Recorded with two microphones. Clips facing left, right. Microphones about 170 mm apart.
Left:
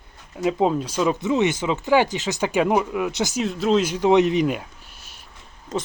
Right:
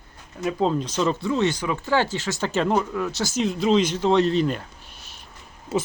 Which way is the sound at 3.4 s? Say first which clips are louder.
Right 1 dB; centre (ahead or behind).